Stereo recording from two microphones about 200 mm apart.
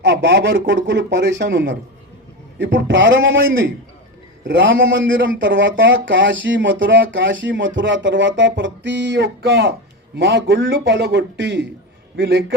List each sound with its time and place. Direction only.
0.0 s a man's voice: 65° right (ahead or behind)
4.4 s a man's voice: 60° right (ahead or behind)